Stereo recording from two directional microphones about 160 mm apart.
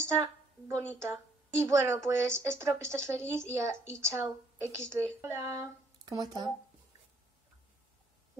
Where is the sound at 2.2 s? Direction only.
5° left (ahead or behind).